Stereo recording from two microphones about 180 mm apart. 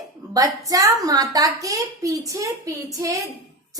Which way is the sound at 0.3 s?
20° right (ahead or behind).